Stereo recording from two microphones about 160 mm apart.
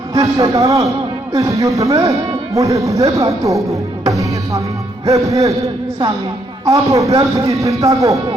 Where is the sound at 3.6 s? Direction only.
20° right (ahead or behind).